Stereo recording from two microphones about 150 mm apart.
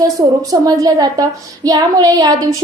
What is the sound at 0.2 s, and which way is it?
A woman's voice, 20° right (ahead or behind).